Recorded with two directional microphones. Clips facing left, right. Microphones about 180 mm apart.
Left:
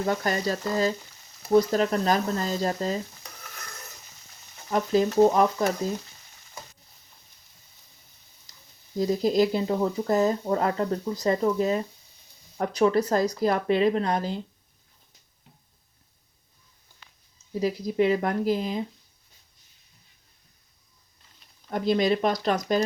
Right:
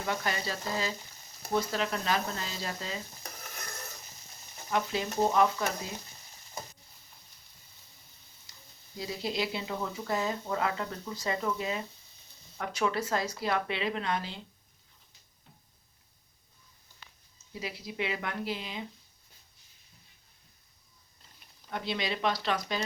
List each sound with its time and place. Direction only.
0.0 s speech: 40° left (ahead or behind)
3.5 s stir: 25° right (ahead or behind)
4.7 s speech: 40° left (ahead or behind)
8.5 s a sound: 40° left (ahead or behind)
9.0 s speech: 45° left (ahead or behind)
17.5 s speech: 40° left (ahead or behind)
21.7 s speech: 45° left (ahead or behind)